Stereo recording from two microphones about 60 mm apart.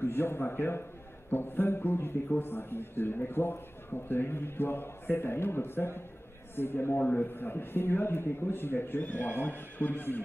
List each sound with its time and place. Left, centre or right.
0.0 s speech: left